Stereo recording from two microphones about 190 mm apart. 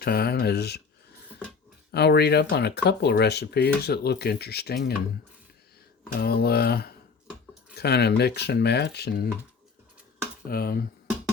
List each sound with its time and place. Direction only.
0.0 s speech: 55° left (ahead or behind)
1.9 s speech: 60° left (ahead or behind)
6.1 s speech: 55° left (ahead or behind)
10.5 s speech: 50° left (ahead or behind)